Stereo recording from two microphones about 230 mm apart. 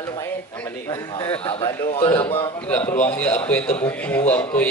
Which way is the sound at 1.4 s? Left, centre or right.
Left.